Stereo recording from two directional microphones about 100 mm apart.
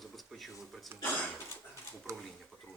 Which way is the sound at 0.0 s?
Centre (ahead or behind).